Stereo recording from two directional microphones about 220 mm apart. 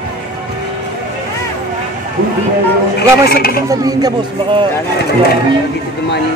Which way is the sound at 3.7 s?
15° right (ahead or behind).